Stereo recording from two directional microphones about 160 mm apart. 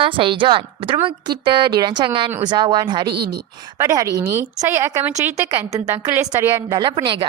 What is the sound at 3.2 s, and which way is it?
Speech, 85° right.